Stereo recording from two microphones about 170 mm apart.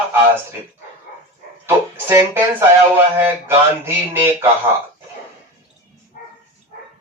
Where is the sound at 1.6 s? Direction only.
15° right (ahead or behind).